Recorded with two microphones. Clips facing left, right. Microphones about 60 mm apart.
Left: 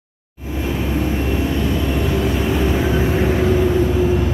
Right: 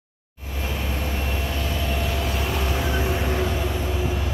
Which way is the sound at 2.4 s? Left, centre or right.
Centre.